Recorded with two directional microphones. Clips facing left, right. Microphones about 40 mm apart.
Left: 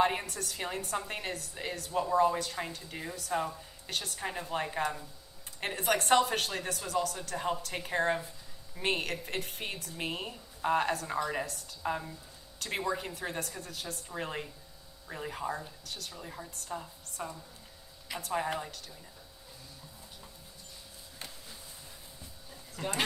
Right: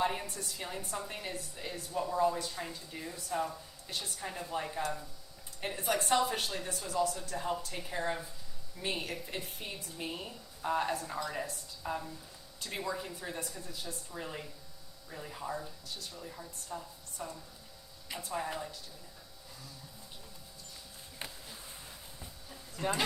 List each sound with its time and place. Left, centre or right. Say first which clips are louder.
0.0 s a woman's voice: left 4 dB; left
4.3 s a woman's voice: left 3 dB; left
16.3 s a woman's voice: left 5 dB; left
17.2 s a woman's voice: left 3 dB; left
18.2 s a woman's voice: left 4 dB; left
21.2 s a sound: right 2 dB; right